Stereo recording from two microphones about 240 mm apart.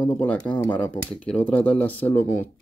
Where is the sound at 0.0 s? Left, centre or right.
Centre.